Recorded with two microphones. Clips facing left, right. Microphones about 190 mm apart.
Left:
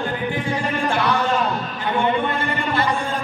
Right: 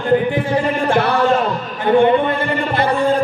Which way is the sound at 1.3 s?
55° right (ahead or behind).